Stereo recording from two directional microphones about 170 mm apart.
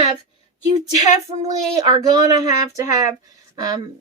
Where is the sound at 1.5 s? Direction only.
25° right (ahead or behind).